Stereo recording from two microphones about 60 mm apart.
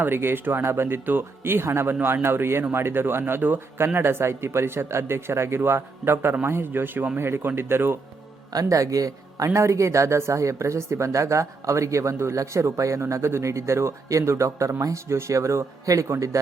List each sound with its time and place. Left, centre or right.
0.0 s speech: right
8.5 s a man's voice: right
9.5 s speech: right
16.3 s a man's voice: right